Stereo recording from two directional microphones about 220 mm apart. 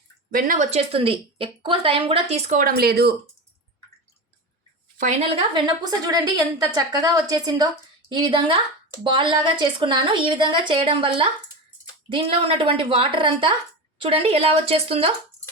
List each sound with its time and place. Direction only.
0.3 s a woman's voice: 40° right (ahead or behind)
4.9 s a woman's voice: 30° right (ahead or behind)